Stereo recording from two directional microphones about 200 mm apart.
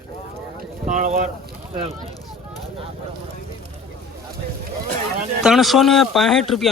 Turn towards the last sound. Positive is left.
turn(degrees=0)  # may be behind; listen again after turning